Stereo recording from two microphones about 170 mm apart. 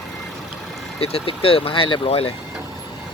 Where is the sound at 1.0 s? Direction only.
35° left (ahead or behind).